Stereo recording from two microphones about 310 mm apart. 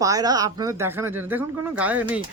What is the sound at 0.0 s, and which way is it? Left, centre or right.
Speech, centre.